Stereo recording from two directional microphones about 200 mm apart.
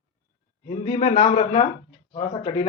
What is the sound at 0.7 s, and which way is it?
Speech, 35° left (ahead or behind).